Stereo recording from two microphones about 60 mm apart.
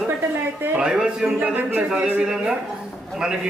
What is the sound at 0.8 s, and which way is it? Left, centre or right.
Speech, centre.